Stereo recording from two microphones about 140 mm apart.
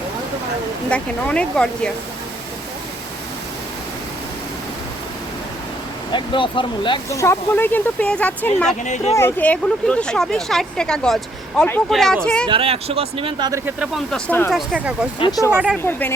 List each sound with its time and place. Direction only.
0.9 s speech: 10° left (ahead or behind)
6.1 s speech: 35° left (ahead or behind)
7.1 s speech: 20° left (ahead or behind)
8.8 s speech: 60° left (ahead or behind)
9.1 s speech: 15° left (ahead or behind)
12.5 s speech: 40° right (ahead or behind)
13.5 s speech: 10° right (ahead or behind)
14.1 s speech: 15° left (ahead or behind)
14.5 s speech: 5° right (ahead or behind)
15.2 s speech: 30° left (ahead or behind)
15.4 s speech: 15° right (ahead or behind)
15.8 s speech: 15° left (ahead or behind)